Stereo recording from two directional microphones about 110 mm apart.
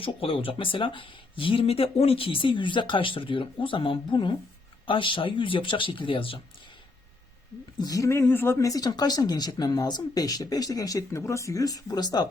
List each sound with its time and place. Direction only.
0.0 s speech: 55° left (ahead or behind)
7.8 s speech: 35° left (ahead or behind)